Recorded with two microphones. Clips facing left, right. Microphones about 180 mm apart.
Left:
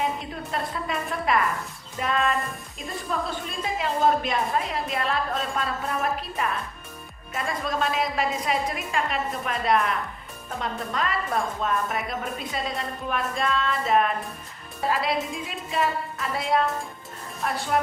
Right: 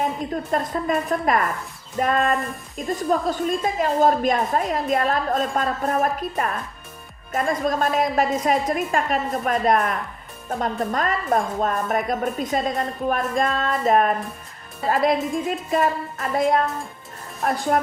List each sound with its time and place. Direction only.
0.0 s a woman's voice: 45° right (ahead or behind)
17.7 s a woman's voice: 45° right (ahead or behind)